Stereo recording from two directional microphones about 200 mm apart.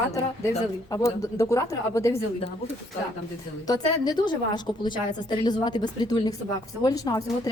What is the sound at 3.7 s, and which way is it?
A woman's voice, 20° left (ahead or behind).